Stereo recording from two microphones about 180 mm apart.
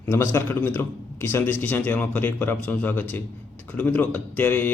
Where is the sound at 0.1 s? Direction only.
15° left (ahead or behind).